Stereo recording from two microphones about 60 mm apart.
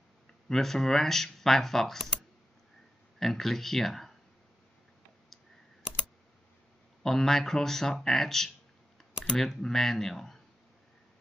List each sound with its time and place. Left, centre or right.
0.5 s speech: centre
7.0 s speech: centre